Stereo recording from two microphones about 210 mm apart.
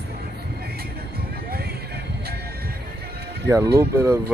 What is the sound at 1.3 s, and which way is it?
Music, 45° right (ahead or behind).